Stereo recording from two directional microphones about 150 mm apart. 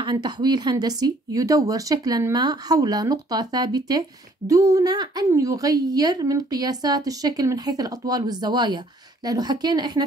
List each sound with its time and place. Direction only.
0.0 s a woman's voice: 30° right (ahead or behind)